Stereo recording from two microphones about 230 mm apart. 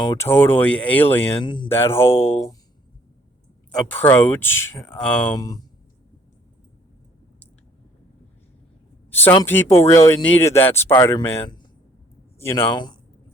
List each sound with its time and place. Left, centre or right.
0.0 s speech: centre
1.4 s speech: centre
3.7 s speech: centre
5.3 s speech: centre
9.0 s speech: centre